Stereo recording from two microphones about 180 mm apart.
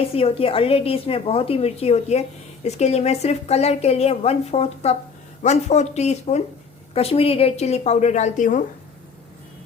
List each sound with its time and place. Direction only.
0.0 s a woman's voice: 35° left (ahead or behind)